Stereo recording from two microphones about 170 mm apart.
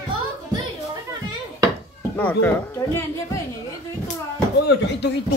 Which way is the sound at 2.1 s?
10° left (ahead or behind).